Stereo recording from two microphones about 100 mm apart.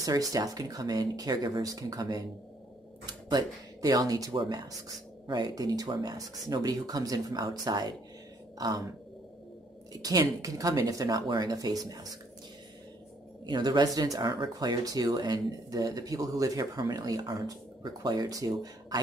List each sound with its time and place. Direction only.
0.0 s speech: 35° right (ahead or behind)
9.9 s speech: 40° right (ahead or behind)
13.5 s speech: 45° right (ahead or behind)